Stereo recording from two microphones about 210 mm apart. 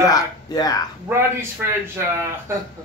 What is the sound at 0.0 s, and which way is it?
Speech, 15° left (ahead or behind).